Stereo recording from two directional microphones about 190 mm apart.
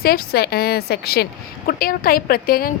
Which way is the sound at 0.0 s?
55° left (ahead or behind).